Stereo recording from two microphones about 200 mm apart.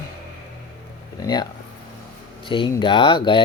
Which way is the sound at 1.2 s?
20° left (ahead or behind).